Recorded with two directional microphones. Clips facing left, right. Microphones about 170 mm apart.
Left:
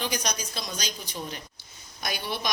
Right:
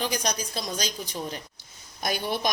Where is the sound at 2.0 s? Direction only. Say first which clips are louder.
Right 4 dB; 50° right (ahead or behind).